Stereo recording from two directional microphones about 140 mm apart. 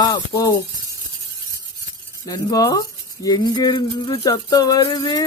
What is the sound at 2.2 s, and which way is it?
Speech, 25° left (ahead or behind).